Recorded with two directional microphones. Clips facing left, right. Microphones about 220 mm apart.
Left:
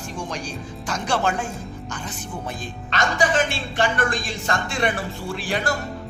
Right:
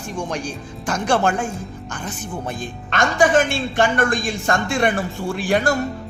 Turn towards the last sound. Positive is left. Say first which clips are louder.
# right 6 dB
turn(degrees=-45)  # may be behind; listen again after turning